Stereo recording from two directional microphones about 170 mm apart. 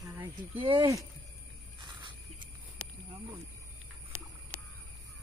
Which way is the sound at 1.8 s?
25° right (ahead or behind).